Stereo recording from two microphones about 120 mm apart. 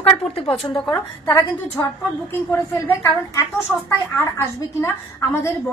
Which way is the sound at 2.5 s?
25° left (ahead or behind).